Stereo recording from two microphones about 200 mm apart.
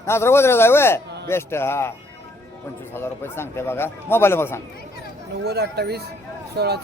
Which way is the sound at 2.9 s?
10° left (ahead or behind).